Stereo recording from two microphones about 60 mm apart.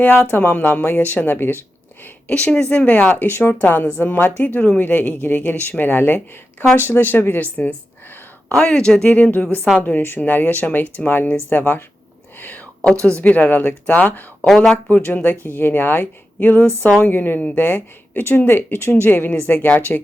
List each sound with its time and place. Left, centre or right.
0.3 s speech: left
2.2 s speech: left
8.4 s speech: centre
12.8 s speech: centre
14.4 s speech: centre
14.8 s speech: left